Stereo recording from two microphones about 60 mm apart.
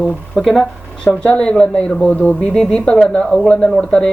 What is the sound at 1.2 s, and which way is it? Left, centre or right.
Speech, centre.